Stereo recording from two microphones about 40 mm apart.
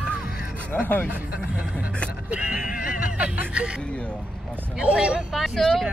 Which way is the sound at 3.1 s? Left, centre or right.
Right.